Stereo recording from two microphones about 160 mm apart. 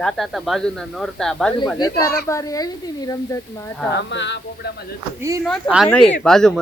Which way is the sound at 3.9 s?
90° left.